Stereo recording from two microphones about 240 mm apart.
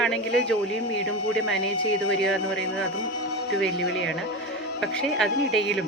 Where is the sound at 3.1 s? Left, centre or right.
Left.